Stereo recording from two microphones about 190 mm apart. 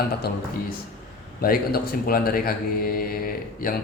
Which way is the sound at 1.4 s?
50° left (ahead or behind).